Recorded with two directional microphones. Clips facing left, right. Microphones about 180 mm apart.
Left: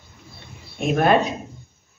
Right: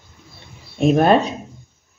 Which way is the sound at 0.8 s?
30° right (ahead or behind).